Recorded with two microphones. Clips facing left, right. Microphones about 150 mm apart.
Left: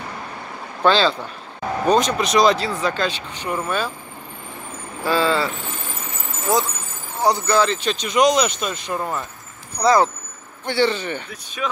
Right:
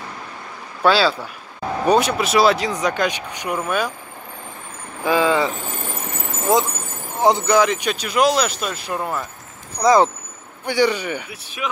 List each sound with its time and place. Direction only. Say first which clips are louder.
0.8 s speech: even; 10° right (ahead or behind)
5.0 s speech: right 2 dB; 15° right (ahead or behind)
6.5 s speech: right 2 dB; 25° right (ahead or behind); by 9.2 s 5° right (ahead or behind)
9.8 s speech: right 2 dB; 20° right (ahead or behind)